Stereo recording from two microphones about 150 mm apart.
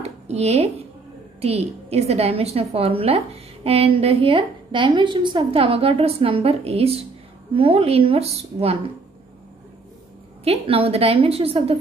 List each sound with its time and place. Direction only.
0.0 s a sound: 45° right (ahead or behind)
1.4 s a woman's voice: 45° right (ahead or behind)
10.4 s a woman's voice: 40° right (ahead or behind)